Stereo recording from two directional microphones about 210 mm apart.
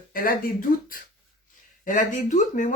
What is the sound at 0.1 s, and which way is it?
Speech, 45° left (ahead or behind).